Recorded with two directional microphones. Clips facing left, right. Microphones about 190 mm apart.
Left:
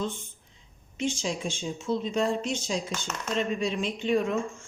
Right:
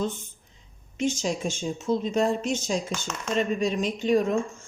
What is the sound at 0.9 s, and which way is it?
Speech, 45° right (ahead or behind).